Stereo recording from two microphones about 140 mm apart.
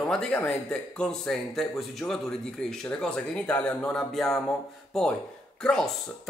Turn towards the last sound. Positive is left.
turn(degrees=5)  # may be behind; listen again after turning